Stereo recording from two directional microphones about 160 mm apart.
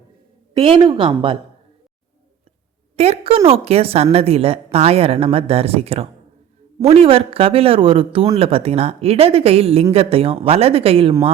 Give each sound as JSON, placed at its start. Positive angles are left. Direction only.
{"t": 0.5, "sound": "a woman's voice", "side_deg": -35}
{"t": 2.9, "sound": "a woman's voice", "side_deg": -40}